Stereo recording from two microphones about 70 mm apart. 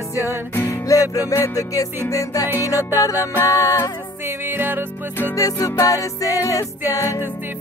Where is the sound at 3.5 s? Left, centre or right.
Right.